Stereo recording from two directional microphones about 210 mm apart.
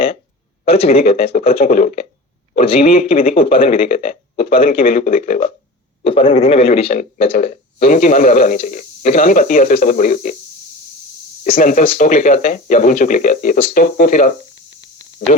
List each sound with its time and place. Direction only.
0.6 s a man's voice: 30° left (ahead or behind)
3.9 s speech: 40° left (ahead or behind)
4.5 s a man's voice: 25° left (ahead or behind)
4.8 s a man's voice: 40° left (ahead or behind)
6.9 s speech: 40° left (ahead or behind)
11.4 s speech: 40° left (ahead or behind)